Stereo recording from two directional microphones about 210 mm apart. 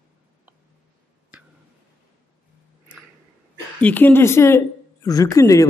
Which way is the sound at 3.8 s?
10° left (ahead or behind).